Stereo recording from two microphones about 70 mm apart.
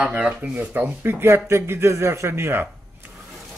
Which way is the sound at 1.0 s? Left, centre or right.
Right.